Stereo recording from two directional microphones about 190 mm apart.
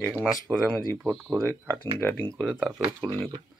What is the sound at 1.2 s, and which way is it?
Speech, 20° right (ahead or behind).